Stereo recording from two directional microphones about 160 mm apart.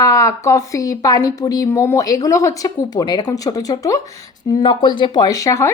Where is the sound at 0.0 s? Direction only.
20° left (ahead or behind).